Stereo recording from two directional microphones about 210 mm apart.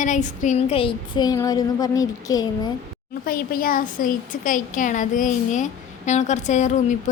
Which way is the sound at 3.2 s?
45° left (ahead or behind).